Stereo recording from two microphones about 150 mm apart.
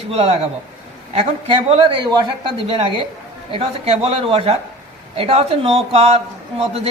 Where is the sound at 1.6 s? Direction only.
35° right (ahead or behind).